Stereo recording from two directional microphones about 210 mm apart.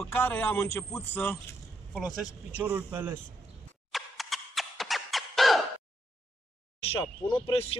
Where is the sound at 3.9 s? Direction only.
Centre (ahead or behind).